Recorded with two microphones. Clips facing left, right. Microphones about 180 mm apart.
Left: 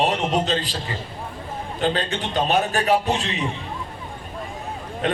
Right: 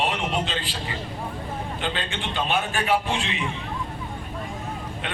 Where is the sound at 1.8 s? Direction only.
40° left (ahead or behind).